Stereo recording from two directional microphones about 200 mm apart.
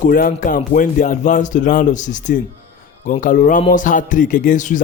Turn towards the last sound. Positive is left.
turn(degrees=40)  # may be behind; listen again after turning